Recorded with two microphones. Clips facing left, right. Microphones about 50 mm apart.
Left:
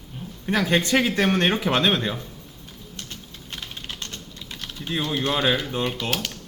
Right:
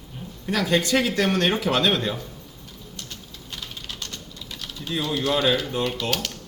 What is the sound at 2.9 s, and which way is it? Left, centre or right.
Typing, left.